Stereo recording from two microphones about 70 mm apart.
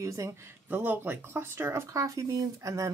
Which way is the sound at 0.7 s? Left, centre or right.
Right.